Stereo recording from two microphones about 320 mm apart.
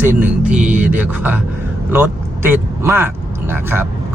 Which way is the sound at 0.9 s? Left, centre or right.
Centre.